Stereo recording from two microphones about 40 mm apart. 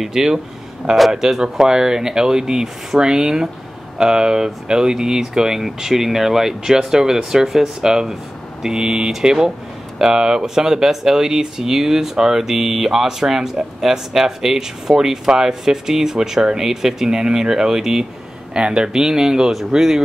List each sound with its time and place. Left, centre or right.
0.0 s speech: centre